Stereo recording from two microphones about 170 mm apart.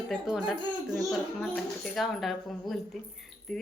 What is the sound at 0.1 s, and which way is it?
A woman's voice, 5° right (ahead or behind).